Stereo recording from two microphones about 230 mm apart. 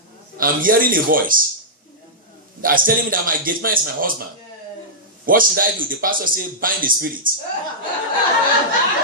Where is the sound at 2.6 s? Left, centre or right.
Right.